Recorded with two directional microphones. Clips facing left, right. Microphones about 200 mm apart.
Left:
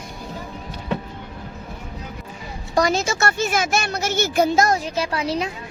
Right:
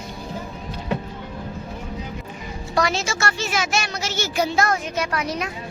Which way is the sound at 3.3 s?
50° left (ahead or behind).